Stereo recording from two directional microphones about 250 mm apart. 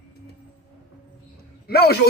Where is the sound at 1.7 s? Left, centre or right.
Left.